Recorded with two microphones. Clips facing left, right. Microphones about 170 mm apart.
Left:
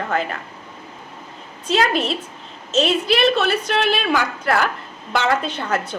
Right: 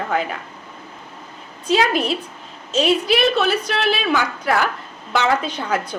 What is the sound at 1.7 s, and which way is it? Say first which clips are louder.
A woman's voice: right 1 dB; 5° right (ahead or behind).